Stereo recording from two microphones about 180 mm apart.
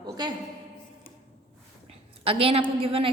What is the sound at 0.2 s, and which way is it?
Speech, 25° right (ahead or behind).